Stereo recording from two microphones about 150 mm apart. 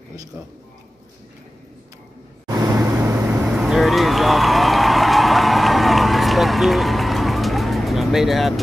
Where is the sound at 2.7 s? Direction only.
20° right (ahead or behind).